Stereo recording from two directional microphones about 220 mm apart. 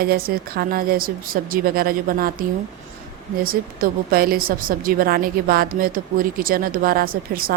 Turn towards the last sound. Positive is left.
turn(degrees=-40)  # may be behind; listen again after turning